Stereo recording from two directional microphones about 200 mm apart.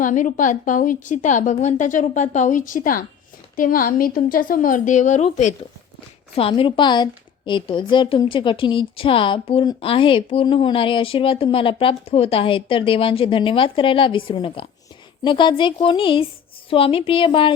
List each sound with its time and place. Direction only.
0.0 s a woman's voice: 40° left (ahead or behind)